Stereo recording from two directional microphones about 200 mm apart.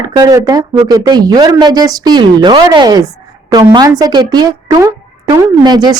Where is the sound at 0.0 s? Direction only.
20° right (ahead or behind).